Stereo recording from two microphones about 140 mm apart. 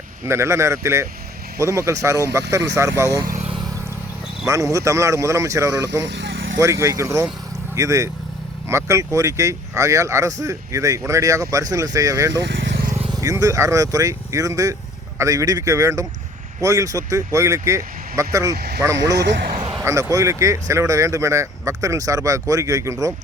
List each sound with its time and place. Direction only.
0.3 s speech: 20° right (ahead or behind)
4.4 s speech: 25° right (ahead or behind)